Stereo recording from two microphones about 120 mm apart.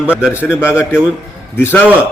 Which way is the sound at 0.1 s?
10° right (ahead or behind).